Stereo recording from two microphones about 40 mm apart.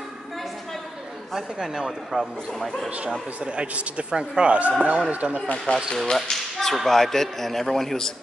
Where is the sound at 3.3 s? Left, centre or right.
Right.